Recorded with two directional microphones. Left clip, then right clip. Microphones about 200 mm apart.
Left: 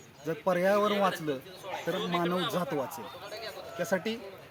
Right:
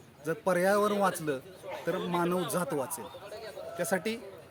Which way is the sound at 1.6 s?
35° right (ahead or behind).